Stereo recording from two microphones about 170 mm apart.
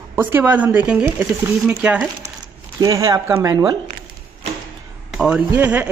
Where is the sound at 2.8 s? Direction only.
20° right (ahead or behind).